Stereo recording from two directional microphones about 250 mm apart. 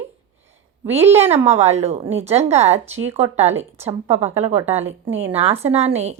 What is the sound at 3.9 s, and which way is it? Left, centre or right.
Speech, right.